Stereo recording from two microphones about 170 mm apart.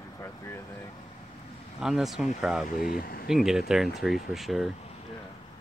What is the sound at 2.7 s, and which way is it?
Speech, 55° left (ahead or behind).